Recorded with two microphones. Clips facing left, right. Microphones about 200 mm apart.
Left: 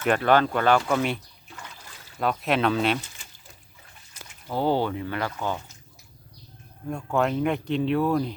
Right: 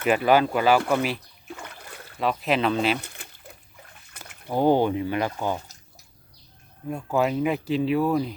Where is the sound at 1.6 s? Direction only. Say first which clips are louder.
Right 4 dB; 60° right (ahead or behind).